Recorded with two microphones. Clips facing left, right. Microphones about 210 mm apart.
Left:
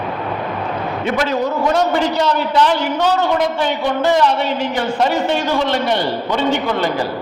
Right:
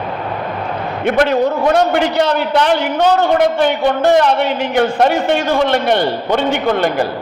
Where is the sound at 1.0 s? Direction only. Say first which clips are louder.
Right 6 dB; 55° right (ahead or behind).